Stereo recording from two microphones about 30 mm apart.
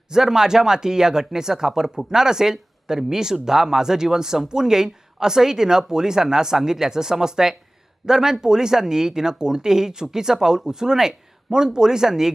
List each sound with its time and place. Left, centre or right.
0.1 s speech: centre